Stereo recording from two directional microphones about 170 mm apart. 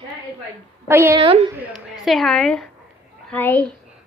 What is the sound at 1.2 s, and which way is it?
Speech, 35° right (ahead or behind).